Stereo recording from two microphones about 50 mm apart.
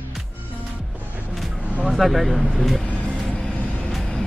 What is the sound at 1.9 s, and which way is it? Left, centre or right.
Speech, centre.